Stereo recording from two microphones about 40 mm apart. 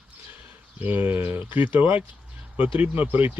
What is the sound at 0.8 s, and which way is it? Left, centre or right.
Speech, right.